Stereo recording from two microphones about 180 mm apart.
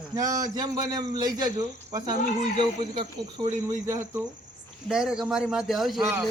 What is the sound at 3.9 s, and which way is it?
Speech, 15° right (ahead or behind).